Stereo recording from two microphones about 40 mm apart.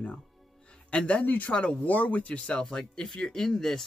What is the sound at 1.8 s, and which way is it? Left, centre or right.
Speech, left.